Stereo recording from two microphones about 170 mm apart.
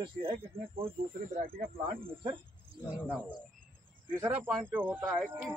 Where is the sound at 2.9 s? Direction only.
10° right (ahead or behind).